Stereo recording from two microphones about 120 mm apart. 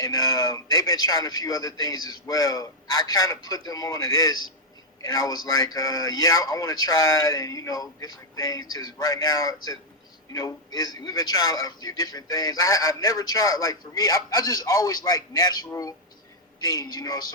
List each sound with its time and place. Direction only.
0.0 s a man's voice: 30° left (ahead or behind)